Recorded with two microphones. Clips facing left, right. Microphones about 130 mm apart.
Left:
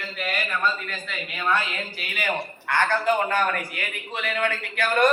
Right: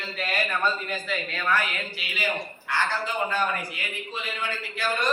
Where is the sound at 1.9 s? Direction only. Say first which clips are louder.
Left 3 dB; 55° left (ahead or behind).